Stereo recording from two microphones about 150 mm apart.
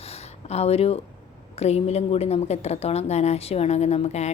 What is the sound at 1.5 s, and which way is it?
A woman's voice, 45° left (ahead or behind).